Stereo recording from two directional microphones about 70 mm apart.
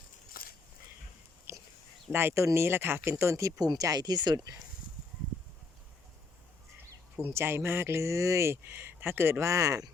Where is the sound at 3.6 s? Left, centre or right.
Right.